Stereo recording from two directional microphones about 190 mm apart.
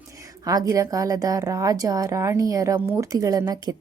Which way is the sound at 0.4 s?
20° right (ahead or behind).